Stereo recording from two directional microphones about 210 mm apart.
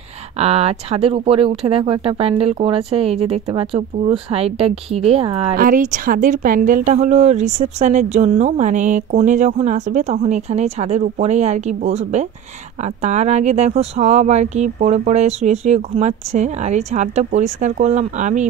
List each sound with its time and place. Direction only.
0.4 s speech: 30° right (ahead or behind)
5.6 s speech: 40° right (ahead or behind)